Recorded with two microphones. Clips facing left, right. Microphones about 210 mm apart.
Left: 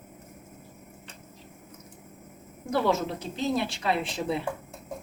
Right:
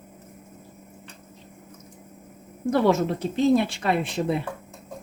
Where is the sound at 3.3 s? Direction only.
55° right (ahead or behind).